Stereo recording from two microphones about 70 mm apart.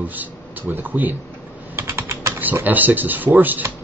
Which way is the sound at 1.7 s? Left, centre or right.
Right.